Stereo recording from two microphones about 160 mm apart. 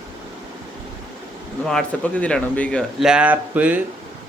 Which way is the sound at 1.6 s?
5° left (ahead or behind).